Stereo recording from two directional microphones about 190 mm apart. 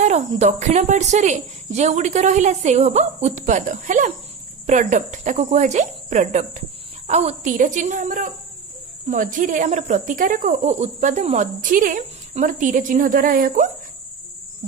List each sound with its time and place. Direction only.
0.0 s speech: 35° right (ahead or behind)